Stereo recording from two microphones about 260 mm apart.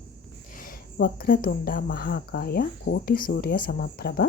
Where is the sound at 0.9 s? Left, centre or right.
Left.